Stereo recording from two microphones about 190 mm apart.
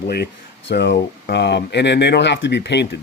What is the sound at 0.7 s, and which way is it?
Speech, 65° left (ahead or behind).